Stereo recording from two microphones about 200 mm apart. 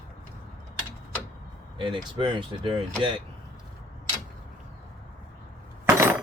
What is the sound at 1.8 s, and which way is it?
Speech, 25° right (ahead or behind).